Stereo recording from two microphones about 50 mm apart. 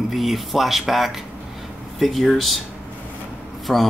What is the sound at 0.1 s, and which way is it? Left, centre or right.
Speech, centre.